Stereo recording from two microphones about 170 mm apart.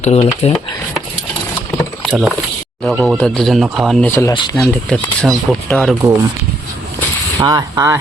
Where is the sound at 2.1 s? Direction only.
5° right (ahead or behind).